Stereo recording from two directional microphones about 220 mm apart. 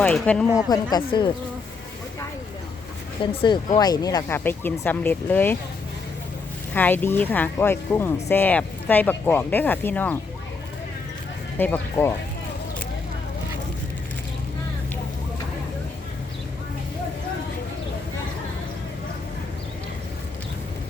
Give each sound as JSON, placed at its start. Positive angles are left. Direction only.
{"t": 0.0, "sound": "speech", "side_deg": 5}
{"t": 0.7, "sound": "speech", "side_deg": 20}
{"t": 3.2, "sound": "speech", "side_deg": 20}
{"t": 6.7, "sound": "speech", "side_deg": 10}
{"t": 11.5, "sound": "speech", "side_deg": 10}